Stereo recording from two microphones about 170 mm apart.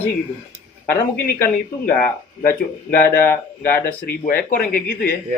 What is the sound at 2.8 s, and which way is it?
Speech, 60° left (ahead or behind).